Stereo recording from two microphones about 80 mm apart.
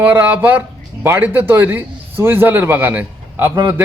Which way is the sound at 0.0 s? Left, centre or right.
Right.